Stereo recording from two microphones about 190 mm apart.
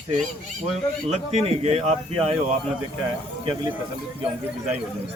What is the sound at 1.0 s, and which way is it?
Speech, 35° right (ahead or behind).